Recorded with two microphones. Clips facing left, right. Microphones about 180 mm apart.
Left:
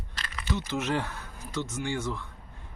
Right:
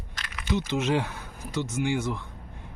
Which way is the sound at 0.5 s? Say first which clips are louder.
Right 4 dB; 15° right (ahead or behind).